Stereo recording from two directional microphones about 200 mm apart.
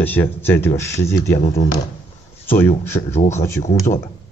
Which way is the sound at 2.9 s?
20° left (ahead or behind).